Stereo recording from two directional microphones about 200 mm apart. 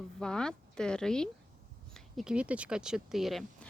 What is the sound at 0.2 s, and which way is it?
Speech, 5° left (ahead or behind).